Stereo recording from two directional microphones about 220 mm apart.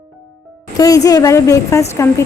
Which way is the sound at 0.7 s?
15° left (ahead or behind).